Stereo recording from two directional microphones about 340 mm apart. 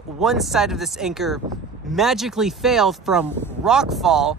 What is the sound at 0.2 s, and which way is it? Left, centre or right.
Speech, centre.